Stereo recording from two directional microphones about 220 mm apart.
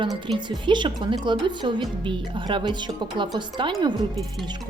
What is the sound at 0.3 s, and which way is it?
Speech, 20° right (ahead or behind).